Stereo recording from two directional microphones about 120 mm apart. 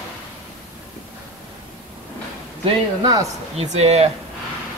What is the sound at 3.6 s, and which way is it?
Speech, 65° right (ahead or behind).